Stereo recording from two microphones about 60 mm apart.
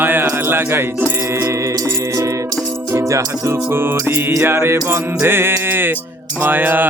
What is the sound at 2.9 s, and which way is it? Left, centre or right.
Music, right.